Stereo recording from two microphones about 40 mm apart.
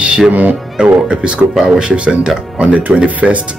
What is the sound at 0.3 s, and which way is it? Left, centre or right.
Speech, right.